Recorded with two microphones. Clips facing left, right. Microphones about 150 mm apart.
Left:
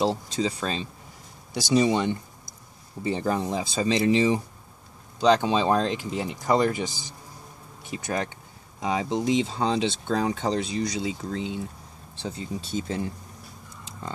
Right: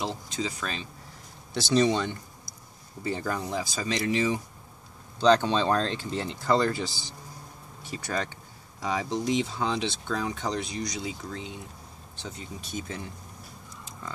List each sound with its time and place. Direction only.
0.0 s speech: 30° left (ahead or behind)
1.5 s speech: 10° left (ahead or behind)
5.2 s speech: 10° left (ahead or behind); by 13.1 s 30° left (ahead or behind)